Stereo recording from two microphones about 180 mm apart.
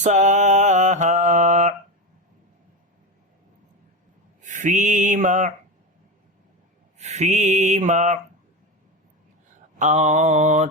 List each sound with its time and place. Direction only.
0.0 s mantra: 40° right (ahead or behind)
4.4 s a sound: 45° right (ahead or behind)
7.0 s mantra: 40° right (ahead or behind)
9.7 s mantra: 40° right (ahead or behind)